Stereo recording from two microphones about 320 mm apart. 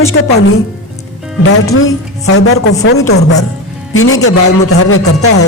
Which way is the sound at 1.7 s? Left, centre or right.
Left.